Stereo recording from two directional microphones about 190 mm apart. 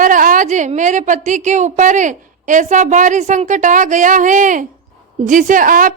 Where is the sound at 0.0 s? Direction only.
45° right (ahead or behind).